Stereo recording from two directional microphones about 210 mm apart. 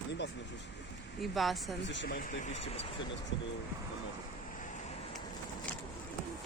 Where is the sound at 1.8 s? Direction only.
60° left (ahead or behind); by 2.8 s 35° left (ahead or behind).